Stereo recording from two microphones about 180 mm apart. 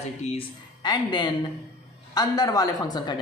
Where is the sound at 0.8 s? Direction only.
25° left (ahead or behind).